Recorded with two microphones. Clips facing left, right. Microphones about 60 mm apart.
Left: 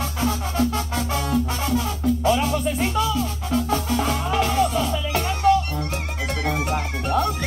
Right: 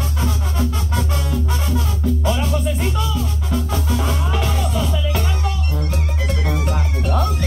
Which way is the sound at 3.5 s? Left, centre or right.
Centre.